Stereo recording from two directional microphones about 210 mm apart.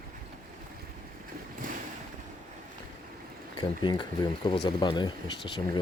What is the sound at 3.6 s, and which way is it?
Speech, 20° left (ahead or behind).